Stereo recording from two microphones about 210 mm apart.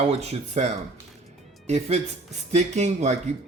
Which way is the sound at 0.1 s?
30° right (ahead or behind).